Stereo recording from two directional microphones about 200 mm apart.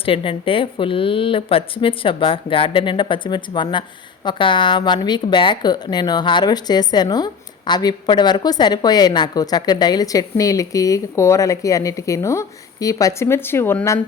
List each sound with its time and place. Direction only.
0.0 s a woman's voice: 25° left (ahead or behind)